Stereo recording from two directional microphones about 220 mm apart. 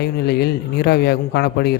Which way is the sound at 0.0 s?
45° left (ahead or behind).